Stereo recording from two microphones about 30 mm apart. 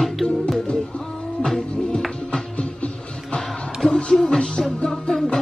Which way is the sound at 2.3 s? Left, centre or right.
Left.